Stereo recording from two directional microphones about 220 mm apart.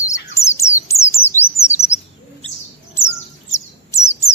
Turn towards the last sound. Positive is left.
turn(degrees=15)  # may be behind; listen again after turning